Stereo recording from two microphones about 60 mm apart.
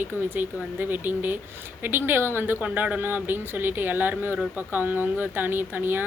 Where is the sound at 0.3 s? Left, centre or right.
Right.